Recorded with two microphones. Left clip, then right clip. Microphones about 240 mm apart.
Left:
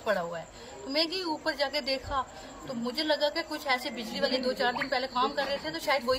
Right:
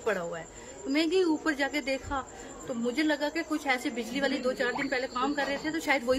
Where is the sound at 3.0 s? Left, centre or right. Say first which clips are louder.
Left 2 dB; centre.